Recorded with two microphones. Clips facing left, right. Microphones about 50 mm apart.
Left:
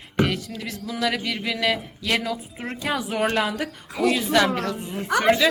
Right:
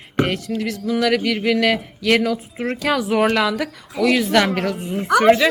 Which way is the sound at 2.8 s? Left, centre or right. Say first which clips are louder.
Right 6 dB; right.